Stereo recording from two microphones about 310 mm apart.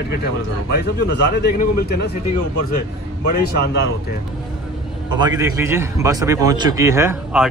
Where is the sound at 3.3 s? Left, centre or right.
Left.